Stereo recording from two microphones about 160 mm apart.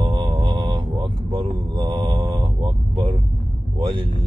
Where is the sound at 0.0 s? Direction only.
30° right (ahead or behind).